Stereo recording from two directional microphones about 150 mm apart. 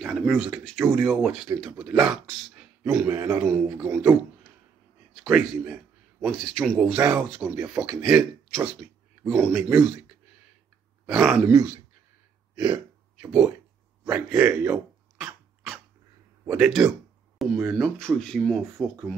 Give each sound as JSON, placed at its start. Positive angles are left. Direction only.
{"t": 0.0, "sound": "speech", "side_deg": 5}
{"t": 3.1, "sound": "speech", "side_deg": -15}
{"t": 3.4, "sound": "speech", "side_deg": 0}
{"t": 5.2, "sound": "speech", "side_deg": -5}
{"t": 11.1, "sound": "speech", "side_deg": -10}
{"t": 12.5, "sound": "a sound", "side_deg": -30}
{"t": 13.2, "sound": "speech", "side_deg": -5}
{"t": 14.0, "sound": "dog", "side_deg": -10}
{"t": 16.4, "sound": "speech", "side_deg": -5}